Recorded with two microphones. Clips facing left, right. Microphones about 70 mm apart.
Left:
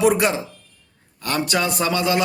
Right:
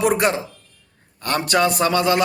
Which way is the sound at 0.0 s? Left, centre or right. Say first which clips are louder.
Left 1 dB; right.